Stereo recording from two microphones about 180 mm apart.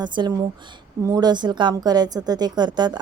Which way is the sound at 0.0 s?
25° right (ahead or behind).